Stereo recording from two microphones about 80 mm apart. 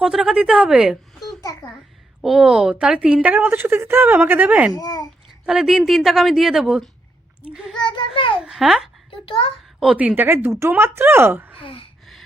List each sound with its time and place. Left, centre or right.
0.0 s a woman's voice: centre
1.4 s a child's voice: left
2.2 s a woman's voice: centre
4.7 s a child's voice: left
5.5 s a woman's voice: centre
7.8 s a sound: left
8.4 s a woman's voice: centre
10.0 s speech: right
11.6 s speech: left